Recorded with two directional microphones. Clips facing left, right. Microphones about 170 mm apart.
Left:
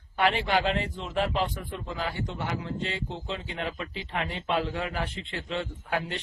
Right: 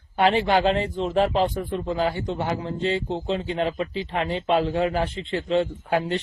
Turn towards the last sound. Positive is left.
turn(degrees=-30)  # may be behind; listen again after turning